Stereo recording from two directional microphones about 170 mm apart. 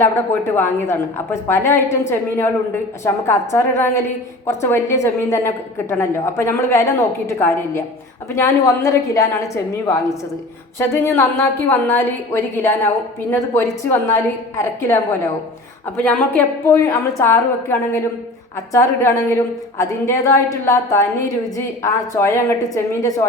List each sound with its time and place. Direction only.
0.0 s a woman's voice: 15° left (ahead or behind)
16.0 s a woman's voice: 10° left (ahead or behind)